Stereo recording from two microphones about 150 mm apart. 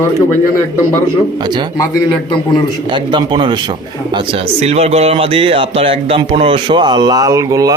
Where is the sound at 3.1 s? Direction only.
30° right (ahead or behind).